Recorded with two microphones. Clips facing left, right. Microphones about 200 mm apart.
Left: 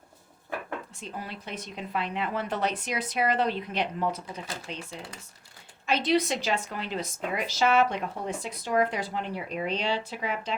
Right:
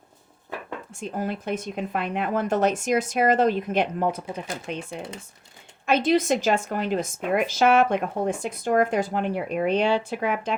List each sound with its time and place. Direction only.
0.9 s a woman's voice: 50° right (ahead or behind)